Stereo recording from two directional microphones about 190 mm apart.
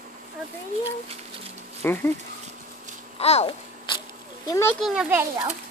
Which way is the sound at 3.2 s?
35° left (ahead or behind).